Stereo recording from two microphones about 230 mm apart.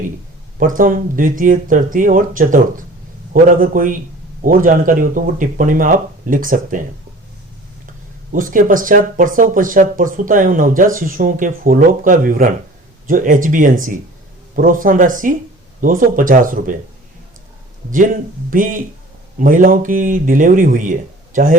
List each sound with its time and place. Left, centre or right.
0.6 s speech: right
8.3 s speech: right
17.9 s speech: right